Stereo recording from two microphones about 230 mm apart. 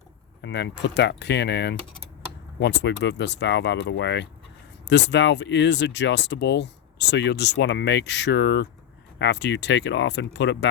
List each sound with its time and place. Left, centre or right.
0.4 s speech: left